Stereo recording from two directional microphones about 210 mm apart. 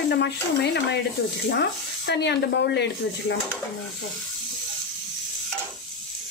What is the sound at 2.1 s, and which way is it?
Speech, 55° left (ahead or behind).